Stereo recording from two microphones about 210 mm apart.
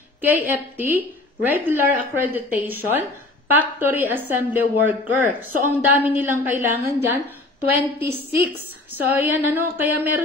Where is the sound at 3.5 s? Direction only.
10° right (ahead or behind).